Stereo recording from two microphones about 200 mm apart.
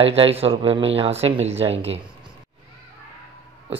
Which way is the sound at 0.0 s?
30° right (ahead or behind).